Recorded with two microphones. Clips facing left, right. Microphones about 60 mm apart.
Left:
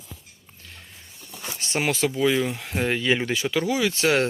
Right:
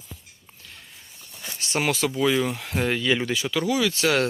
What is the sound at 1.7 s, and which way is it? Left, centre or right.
Speech, left.